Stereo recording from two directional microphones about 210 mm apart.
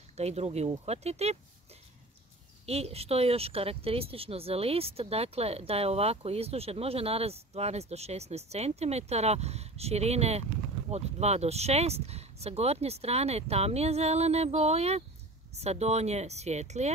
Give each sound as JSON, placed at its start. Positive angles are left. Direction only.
{"t": 0.2, "sound": "speech", "side_deg": -30}
{"t": 2.6, "sound": "speech", "side_deg": -30}